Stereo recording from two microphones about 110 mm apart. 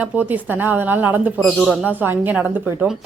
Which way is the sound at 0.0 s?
15° right (ahead or behind).